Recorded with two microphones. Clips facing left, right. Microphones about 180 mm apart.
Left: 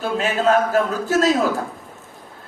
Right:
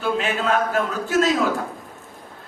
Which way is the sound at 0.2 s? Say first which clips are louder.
Left 4 dB; 40° left (ahead or behind).